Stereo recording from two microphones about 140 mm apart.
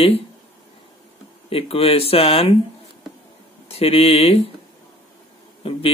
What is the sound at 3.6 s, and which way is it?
Speech, 45° left (ahead or behind).